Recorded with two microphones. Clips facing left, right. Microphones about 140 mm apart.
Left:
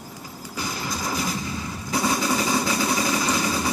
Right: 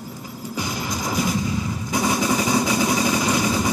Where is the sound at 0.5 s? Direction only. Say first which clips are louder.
Right 2 dB; 15° right (ahead or behind).